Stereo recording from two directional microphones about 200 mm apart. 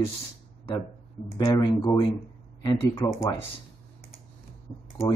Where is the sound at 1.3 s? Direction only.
15° left (ahead or behind).